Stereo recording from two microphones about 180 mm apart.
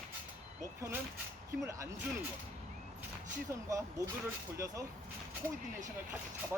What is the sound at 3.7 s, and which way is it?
Speech, 20° right (ahead or behind).